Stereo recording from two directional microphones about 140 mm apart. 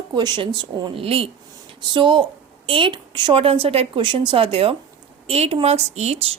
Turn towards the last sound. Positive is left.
turn(degrees=-50)  # may be behind; listen again after turning